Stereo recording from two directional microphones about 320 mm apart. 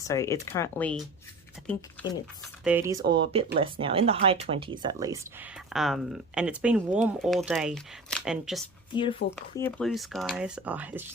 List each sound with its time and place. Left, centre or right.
0.0 s speech: centre
8.9 s speech: centre